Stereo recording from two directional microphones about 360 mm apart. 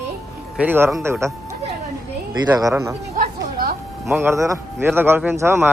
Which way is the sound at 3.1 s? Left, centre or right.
Right.